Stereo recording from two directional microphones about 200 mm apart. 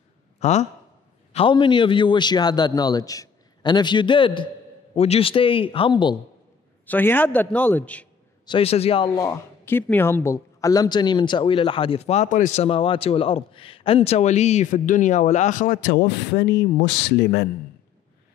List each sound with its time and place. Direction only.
0.4 s a man's voice: 35° left (ahead or behind)
6.9 s a man's voice: 10° left (ahead or behind)
8.5 s a man's voice: 30° left (ahead or behind); by 17.5 s 60° left (ahead or behind)